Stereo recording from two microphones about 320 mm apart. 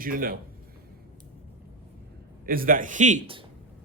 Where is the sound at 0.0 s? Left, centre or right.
Right.